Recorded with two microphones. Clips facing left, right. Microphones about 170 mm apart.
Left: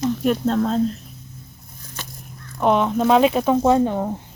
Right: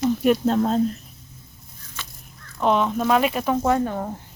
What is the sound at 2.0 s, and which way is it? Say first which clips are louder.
Fowl: left 3 dB; 40° left (ahead or behind).